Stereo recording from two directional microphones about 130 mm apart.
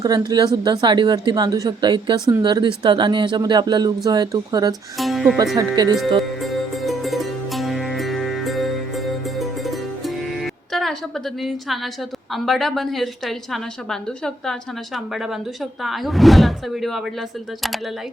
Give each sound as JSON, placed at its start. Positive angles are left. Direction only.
{"t": 0.0, "sound": "speech", "side_deg": -30}
{"t": 4.9, "sound": "speech", "side_deg": 0}
{"t": 5.5, "sound": "speech", "side_deg": -35}
{"t": 6.4, "sound": "music", "side_deg": 0}
{"t": 12.3, "sound": "a woman's voice", "side_deg": 0}